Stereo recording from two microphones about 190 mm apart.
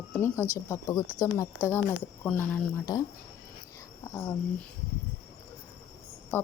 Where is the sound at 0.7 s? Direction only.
15° left (ahead or behind).